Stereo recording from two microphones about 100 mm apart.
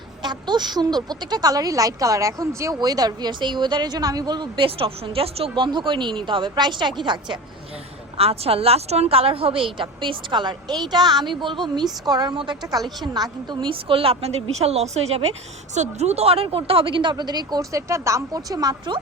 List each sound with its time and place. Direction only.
0.2 s speech: 50° right (ahead or behind); by 5.5 s 75° right (ahead or behind)
5.5 s speech: 50° right (ahead or behind)
8.2 s a woman's voice: 80° right; by 12.4 s 45° right (ahead or behind)
12.8 s a woman's voice: centre (ahead or behind)
13.1 s a woman's voice: 45° right (ahead or behind)